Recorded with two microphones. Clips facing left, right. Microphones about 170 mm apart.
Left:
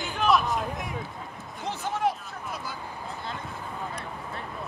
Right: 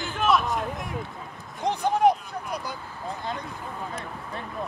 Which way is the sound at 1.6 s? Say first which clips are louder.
Right 7 dB; 15° right (ahead or behind).